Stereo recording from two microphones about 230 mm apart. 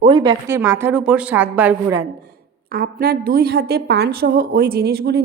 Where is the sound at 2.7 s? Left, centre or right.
Right.